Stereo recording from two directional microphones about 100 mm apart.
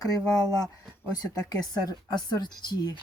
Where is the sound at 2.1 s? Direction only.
45° left (ahead or behind).